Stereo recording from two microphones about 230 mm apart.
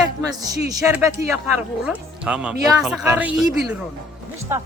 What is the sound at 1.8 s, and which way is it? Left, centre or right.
Speech, centre.